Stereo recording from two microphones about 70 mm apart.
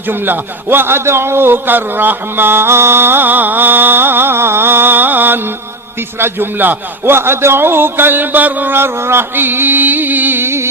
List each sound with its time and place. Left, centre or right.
0.1 s a man's voice: right